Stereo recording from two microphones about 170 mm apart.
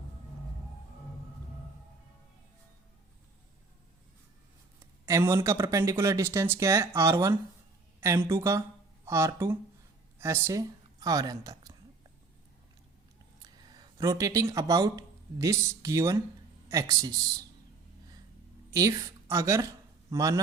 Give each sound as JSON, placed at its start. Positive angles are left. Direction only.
{"t": 4.8, "sound": "speech", "side_deg": -15}
{"t": 13.4, "sound": "a sound", "side_deg": -25}
{"t": 14.5, "sound": "speech", "side_deg": -20}
{"t": 18.7, "sound": "a woman's voice", "side_deg": -20}